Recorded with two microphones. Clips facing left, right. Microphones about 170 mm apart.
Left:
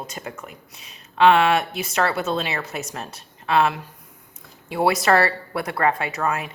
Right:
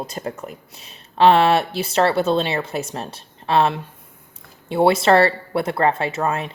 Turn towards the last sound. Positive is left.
turn(degrees=-30)  # may be behind; listen again after turning